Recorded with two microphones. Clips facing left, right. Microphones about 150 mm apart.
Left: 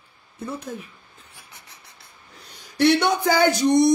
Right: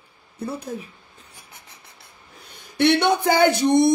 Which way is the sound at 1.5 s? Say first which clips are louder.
Right 1 dB; 55° right (ahead or behind).